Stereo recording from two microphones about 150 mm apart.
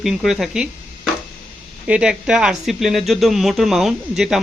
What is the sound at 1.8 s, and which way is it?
Speech, 5° right (ahead or behind).